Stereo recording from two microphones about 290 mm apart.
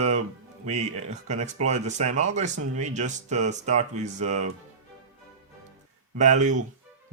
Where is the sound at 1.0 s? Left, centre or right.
Right.